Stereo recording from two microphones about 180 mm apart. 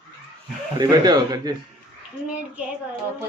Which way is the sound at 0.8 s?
20° right (ahead or behind).